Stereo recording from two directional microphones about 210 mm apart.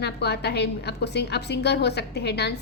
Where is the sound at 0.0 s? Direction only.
50° left (ahead or behind).